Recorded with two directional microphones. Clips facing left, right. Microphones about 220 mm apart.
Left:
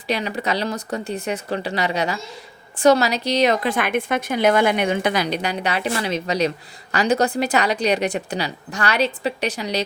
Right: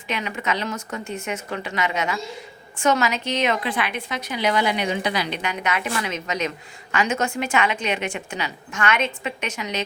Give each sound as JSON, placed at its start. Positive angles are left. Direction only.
{"t": 0.1, "sound": "a woman's voice", "side_deg": 35}